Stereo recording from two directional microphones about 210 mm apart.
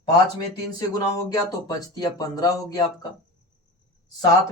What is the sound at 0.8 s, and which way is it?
Speech, 20° left (ahead or behind).